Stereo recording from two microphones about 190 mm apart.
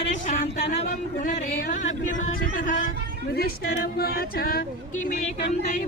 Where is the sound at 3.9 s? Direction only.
55° left (ahead or behind).